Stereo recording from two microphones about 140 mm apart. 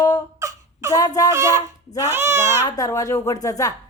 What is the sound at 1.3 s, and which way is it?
A child's voice, 20° right (ahead or behind).